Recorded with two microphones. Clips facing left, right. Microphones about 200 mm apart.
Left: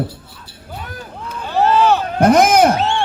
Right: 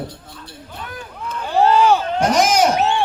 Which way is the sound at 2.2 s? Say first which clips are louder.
Left 8 dB; 55° left (ahead or behind).